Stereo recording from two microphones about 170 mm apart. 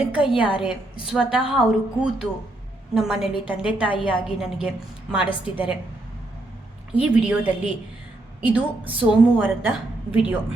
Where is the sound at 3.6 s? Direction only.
30° left (ahead or behind).